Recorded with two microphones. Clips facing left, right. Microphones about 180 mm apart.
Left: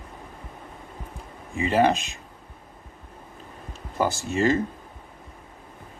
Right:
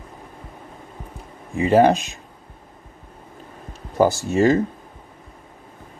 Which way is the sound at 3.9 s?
40° right (ahead or behind).